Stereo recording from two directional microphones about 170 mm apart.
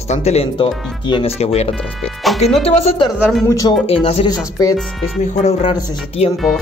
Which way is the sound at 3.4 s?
20° left (ahead or behind).